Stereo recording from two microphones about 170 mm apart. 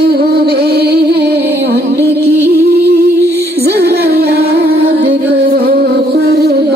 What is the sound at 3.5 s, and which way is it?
Music, 65° right (ahead or behind).